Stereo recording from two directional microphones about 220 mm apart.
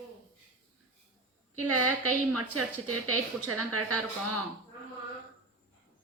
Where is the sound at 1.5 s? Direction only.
90° right.